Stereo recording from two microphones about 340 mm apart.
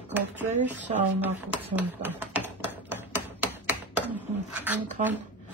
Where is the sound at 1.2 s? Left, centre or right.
Centre.